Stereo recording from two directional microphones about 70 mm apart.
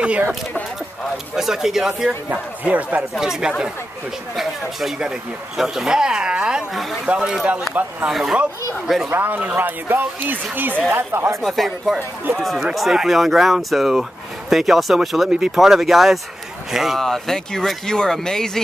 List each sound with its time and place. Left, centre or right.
1.1 s speech: centre
2.3 s speech: right
3.0 s speech: centre
6.7 s speech: centre
7.1 s speech: centre
8.1 s speech: centre
9.1 s speech: right
11.4 s speech: centre